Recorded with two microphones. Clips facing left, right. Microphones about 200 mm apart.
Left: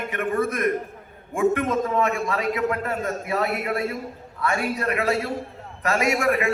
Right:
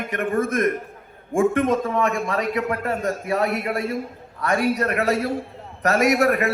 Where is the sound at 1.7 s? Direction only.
35° right (ahead or behind).